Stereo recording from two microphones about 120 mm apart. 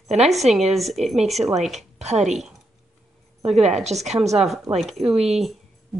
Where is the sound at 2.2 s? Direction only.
Centre (ahead or behind).